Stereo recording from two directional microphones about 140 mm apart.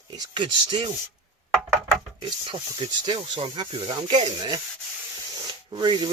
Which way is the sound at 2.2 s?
35° right (ahead or behind).